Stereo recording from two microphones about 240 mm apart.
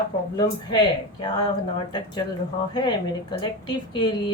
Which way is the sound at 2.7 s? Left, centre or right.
Centre.